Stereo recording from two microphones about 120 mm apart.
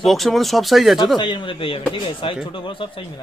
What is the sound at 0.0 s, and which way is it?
Speech, centre (ahead or behind).